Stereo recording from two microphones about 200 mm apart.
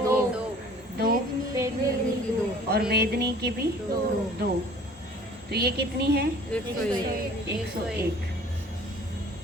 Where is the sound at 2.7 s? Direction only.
55° right (ahead or behind).